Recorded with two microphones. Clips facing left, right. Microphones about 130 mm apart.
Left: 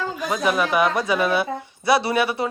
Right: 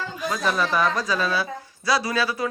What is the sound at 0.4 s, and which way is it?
A man's voice, 10° left (ahead or behind).